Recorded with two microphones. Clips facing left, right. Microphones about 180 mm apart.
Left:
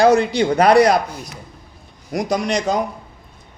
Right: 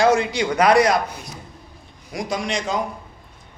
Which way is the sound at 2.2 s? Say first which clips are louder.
Left 5 dB; 40° left (ahead or behind).